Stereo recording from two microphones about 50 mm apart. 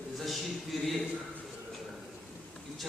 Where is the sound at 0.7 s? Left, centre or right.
Centre.